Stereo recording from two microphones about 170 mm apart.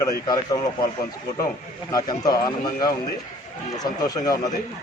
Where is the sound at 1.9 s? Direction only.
20° left (ahead or behind).